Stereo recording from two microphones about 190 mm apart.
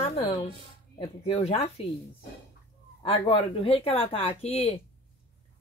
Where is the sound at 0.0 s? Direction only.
30° left (ahead or behind).